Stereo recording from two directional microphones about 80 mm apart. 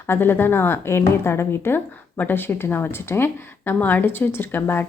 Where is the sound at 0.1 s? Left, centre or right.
Left.